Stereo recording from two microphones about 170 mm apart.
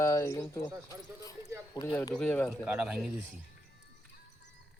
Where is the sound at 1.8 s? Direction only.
20° left (ahead or behind).